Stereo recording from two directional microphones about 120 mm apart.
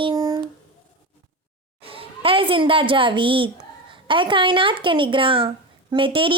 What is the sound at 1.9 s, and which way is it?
A child's voice, 50° right (ahead or behind).